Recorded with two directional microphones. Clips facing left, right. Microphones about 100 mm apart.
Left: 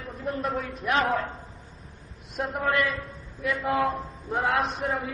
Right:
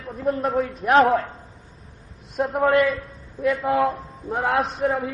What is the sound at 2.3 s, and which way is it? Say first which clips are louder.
Speech: right 8 dB; 40° right (ahead or behind).